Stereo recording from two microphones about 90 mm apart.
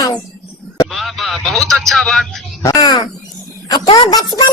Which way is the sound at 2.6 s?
45° left (ahead or behind).